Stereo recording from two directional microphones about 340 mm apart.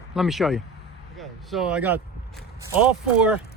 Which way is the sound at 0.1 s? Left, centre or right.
Centre.